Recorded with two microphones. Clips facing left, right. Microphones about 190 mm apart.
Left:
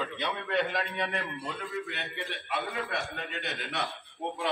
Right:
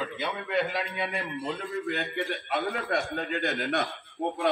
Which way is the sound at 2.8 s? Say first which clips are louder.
Right 6 dB; 55° right (ahead or behind).